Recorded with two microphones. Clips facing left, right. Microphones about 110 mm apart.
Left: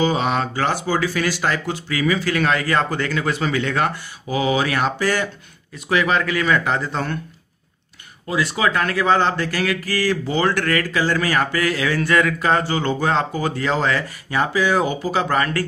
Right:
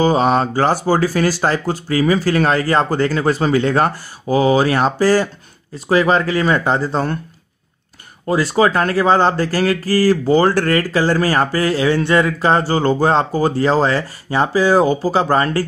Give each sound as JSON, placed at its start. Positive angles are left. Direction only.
{"t": 0.0, "sound": "speech", "side_deg": -40}
{"t": 8.3, "sound": "speech", "side_deg": -40}